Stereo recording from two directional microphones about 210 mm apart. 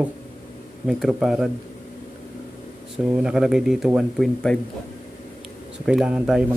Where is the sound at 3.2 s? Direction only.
5° right (ahead or behind).